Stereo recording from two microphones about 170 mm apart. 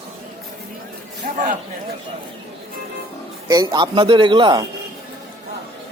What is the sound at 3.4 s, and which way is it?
A man's voice, 20° right (ahead or behind).